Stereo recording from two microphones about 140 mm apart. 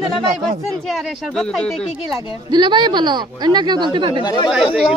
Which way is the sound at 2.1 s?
30° right (ahead or behind).